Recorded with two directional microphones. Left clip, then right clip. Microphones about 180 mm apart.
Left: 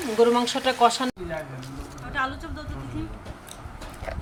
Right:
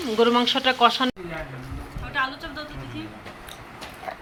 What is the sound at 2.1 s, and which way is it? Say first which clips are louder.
Speech: right 2 dB; 60° left (ahead or behind).